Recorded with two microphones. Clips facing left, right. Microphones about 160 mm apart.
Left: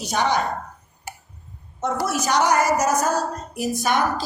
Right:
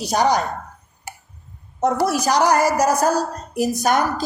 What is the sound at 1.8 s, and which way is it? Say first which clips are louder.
A woman's voice: right 5 dB; 35° right (ahead or behind).